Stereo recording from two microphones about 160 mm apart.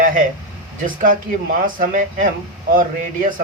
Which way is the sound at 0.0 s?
55° right (ahead or behind).